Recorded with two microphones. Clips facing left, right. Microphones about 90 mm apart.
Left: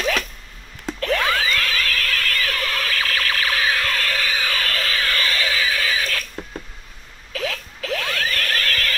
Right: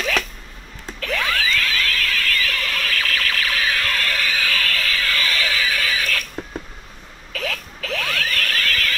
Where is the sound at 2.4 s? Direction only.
35° left (ahead or behind).